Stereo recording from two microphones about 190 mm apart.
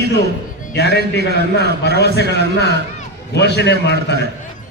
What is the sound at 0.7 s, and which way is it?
A man's voice, 60° left (ahead or behind).